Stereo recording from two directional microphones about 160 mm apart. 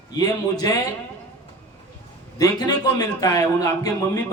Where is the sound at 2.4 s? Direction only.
25° left (ahead or behind).